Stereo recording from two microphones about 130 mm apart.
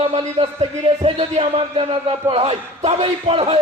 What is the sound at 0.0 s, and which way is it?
Speech, 50° right (ahead or behind).